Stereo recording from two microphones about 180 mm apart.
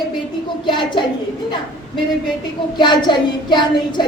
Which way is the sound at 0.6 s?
25° left (ahead or behind).